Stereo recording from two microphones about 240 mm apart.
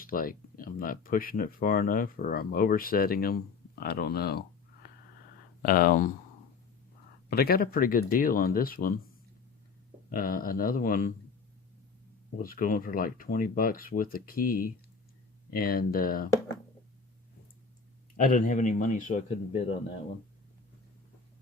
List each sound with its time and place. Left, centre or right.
0.0 s speech: left
7.3 s speech: left
10.1 s speech: left
12.4 s speech: left
18.2 s speech: left